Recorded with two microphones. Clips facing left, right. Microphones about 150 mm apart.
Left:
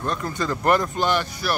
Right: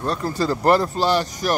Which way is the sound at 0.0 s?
35° right (ahead or behind).